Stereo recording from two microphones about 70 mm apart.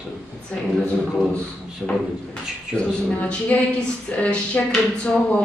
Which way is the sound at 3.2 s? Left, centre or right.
Left.